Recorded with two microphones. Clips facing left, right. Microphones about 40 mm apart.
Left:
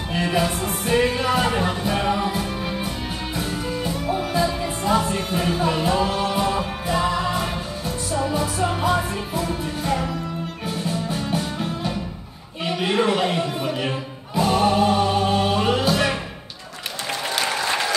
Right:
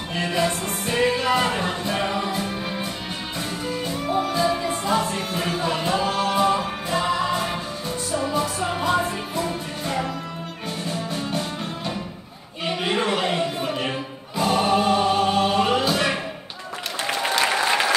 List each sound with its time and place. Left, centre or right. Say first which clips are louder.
0.1 s music: left 1 dB; centre
12.6 s a sound: left 2 dB; centre
14.3 s music: left 1 dB; centre
17.1 s applause: right 3 dB; centre